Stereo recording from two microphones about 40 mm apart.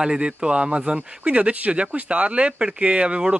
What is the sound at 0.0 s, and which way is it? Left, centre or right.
Speech, right.